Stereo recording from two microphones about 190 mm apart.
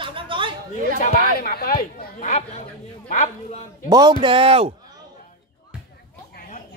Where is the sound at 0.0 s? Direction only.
25° right (ahead or behind).